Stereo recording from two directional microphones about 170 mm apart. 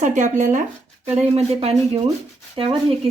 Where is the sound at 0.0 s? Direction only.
45° right (ahead or behind).